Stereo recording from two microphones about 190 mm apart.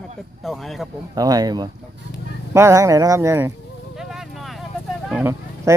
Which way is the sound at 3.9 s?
Centre (ahead or behind).